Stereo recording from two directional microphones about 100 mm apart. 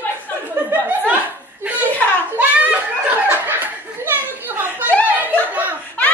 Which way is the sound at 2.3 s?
15° right (ahead or behind).